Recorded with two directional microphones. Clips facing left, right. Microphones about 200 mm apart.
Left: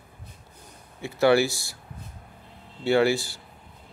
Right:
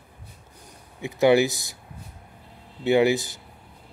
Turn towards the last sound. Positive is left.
turn(degrees=-20)  # may be behind; listen again after turning